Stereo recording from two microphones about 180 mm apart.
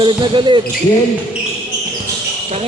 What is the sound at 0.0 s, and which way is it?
Speech, 25° right (ahead or behind).